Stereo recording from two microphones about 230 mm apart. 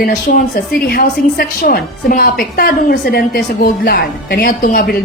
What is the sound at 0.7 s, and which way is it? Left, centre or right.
A woman's voice, left.